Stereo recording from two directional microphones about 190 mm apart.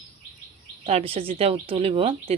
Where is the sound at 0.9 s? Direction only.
30° right (ahead or behind).